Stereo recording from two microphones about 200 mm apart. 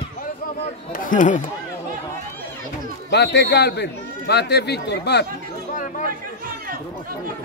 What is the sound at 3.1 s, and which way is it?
Speech, 60° left (ahead or behind).